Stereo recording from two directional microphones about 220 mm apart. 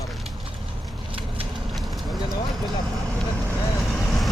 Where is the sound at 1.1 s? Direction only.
25° right (ahead or behind).